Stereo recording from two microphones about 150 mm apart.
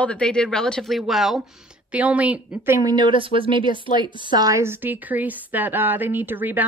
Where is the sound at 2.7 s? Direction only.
30° right (ahead or behind); by 6.6 s 10° right (ahead or behind).